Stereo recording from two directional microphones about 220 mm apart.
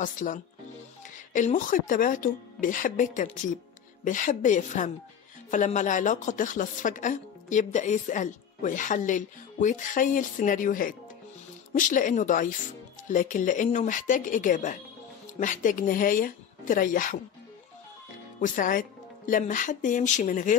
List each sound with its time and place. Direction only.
0.0 s a woman's voice: 35° left (ahead or behind)
18.4 s a woman's voice: 40° left (ahead or behind)